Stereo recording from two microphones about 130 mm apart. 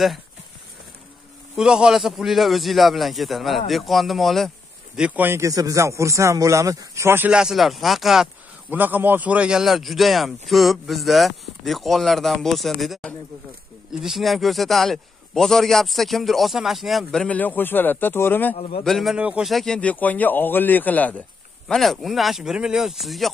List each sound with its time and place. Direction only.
1.6 s a man's voice: 5° right (ahead or behind)
4.9 s speech: 10° right (ahead or behind)
7.2 s a man's voice: 5° right (ahead or behind)
8.6 s a man's voice: 15° right (ahead or behind); by 18.6 s 15° left (ahead or behind)
18.6 s a man's voice: 50° left (ahead or behind)
18.9 s a man's voice: centre (ahead or behind)